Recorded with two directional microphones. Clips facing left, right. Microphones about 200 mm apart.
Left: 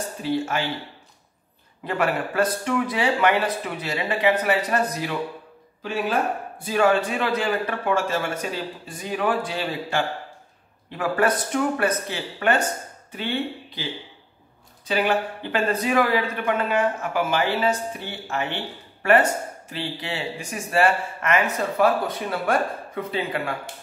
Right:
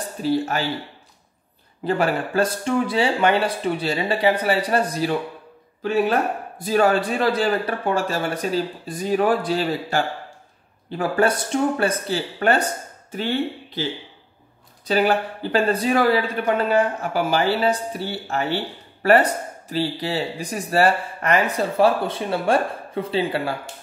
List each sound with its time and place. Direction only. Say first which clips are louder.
0.2 s speech: right 3 dB; 40° right (ahead or behind)
1.9 s speech: right 3 dB; 30° right (ahead or behind)
6.6 s speech: right 2 dB; 40° right (ahead or behind)
14.9 s speech: right 3 dB; 35° right (ahead or behind)